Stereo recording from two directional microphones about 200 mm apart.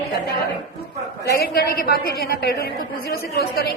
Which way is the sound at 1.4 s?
50° left (ahead or behind).